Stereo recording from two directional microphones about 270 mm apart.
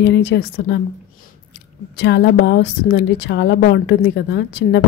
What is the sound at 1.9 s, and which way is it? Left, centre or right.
A woman's voice, left.